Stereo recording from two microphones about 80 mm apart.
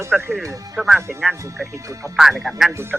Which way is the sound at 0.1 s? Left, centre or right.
Centre.